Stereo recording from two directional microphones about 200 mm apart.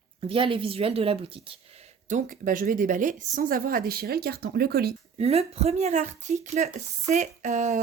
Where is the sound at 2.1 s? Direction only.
40° right (ahead or behind).